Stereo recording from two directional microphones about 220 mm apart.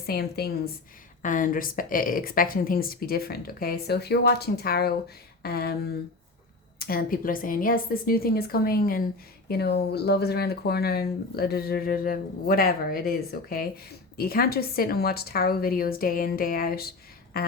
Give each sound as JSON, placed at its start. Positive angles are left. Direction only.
{"t": 0.0, "sound": "a woman's voice", "side_deg": 45}